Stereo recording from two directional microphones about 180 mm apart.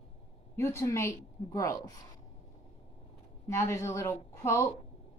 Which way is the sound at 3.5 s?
15° left (ahead or behind).